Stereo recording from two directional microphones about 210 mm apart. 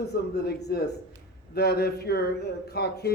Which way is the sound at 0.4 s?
50° left (ahead or behind).